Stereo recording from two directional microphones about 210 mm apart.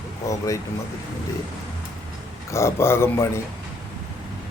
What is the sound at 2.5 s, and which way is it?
Speech, 10° left (ahead or behind).